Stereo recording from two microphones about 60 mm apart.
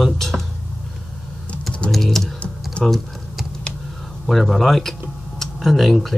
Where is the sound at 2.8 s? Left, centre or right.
Centre.